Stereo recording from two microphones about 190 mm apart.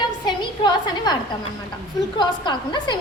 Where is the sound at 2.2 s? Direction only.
25° left (ahead or behind).